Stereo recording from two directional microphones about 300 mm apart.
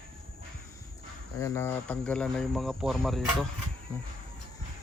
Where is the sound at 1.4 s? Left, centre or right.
Centre.